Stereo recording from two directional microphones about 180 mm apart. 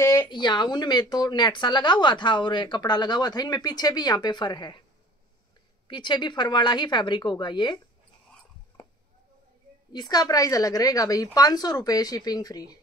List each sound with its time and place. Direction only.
0.0 s speech: 15° left (ahead or behind)
5.9 s speech: 25° left (ahead or behind)
9.9 s speech: 20° left (ahead or behind)